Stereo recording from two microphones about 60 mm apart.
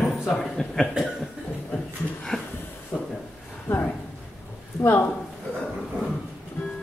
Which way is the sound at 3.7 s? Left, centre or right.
Left.